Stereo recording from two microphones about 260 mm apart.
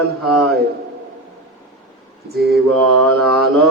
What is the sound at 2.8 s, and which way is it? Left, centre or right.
Mantra, centre.